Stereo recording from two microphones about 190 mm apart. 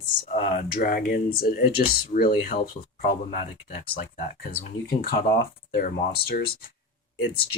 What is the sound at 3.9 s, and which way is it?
Speech, 50° left (ahead or behind).